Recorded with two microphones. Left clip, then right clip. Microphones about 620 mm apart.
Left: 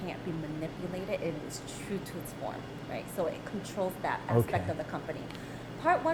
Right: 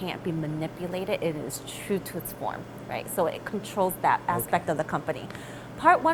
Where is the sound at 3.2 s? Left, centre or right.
Right.